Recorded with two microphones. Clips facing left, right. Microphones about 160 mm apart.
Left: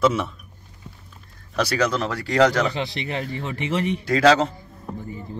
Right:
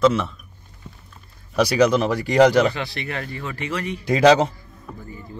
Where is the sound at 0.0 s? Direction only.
5° left (ahead or behind).